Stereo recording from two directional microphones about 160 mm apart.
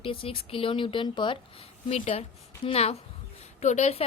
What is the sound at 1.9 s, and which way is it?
A woman's voice, 45° left (ahead or behind).